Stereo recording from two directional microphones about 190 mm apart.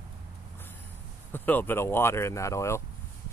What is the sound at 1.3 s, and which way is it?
Speech, 10° left (ahead or behind).